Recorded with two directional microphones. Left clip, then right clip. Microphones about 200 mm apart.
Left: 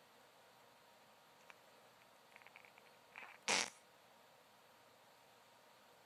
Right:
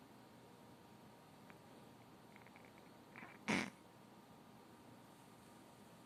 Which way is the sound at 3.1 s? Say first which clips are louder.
Left 3 dB; 25° left (ahead or behind).